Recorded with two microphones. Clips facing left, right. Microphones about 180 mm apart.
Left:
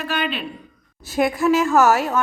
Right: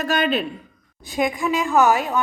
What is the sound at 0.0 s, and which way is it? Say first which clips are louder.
Speech: right 4 dB; 45° right (ahead or behind).